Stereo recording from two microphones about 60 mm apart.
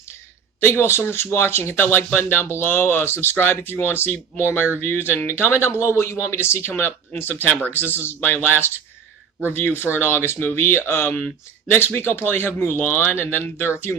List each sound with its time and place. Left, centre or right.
0.6 s speech: left
12.2 s speech: left